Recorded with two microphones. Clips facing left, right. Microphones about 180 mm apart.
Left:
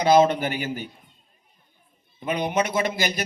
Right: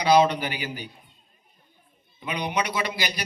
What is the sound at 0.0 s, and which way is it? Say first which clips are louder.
Speech: left 2 dB; 50° left (ahead or behind).